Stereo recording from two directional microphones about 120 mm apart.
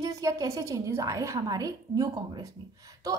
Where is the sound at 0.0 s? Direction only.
30° right (ahead or behind).